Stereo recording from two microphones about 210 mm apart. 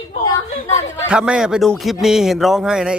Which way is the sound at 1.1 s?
5° right (ahead or behind).